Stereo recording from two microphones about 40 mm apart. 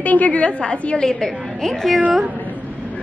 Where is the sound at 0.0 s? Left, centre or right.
Left.